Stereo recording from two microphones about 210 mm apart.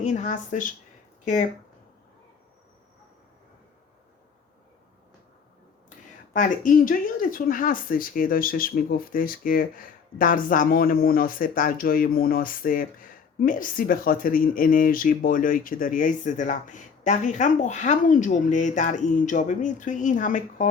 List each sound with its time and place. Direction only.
0.0 s speech: 35° left (ahead or behind)
6.3 s speech: 40° left (ahead or behind)